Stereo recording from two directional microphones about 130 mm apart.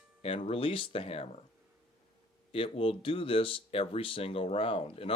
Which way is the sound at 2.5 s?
45° left (ahead or behind).